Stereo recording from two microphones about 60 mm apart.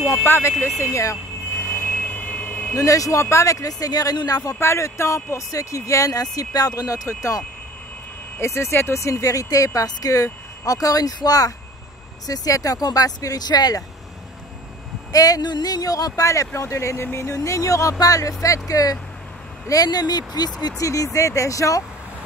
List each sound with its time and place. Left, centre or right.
0.1 s speech: left
0.7 s speech: left
1.6 s vehicle: left
2.7 s speech: left
4.6 s speech: left
6.3 s speech: left
12.3 s speech: left
15.1 s speech: left
17.4 s speech: left
19.7 s speech: left
20.7 s speech: left